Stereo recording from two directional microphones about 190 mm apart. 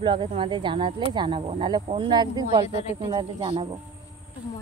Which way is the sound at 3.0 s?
25° right (ahead or behind).